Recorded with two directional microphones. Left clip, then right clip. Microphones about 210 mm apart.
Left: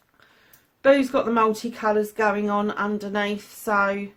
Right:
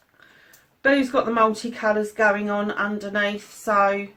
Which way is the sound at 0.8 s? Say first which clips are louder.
Left 1 dB; 50° left (ahead or behind).